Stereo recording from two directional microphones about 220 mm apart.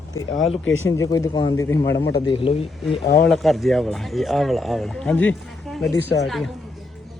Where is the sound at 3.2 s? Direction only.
Centre (ahead or behind).